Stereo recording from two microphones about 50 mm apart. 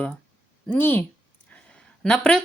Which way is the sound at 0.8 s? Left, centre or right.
Left.